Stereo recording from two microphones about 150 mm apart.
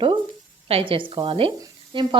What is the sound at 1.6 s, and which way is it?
Sizzle, 30° right (ahead or behind).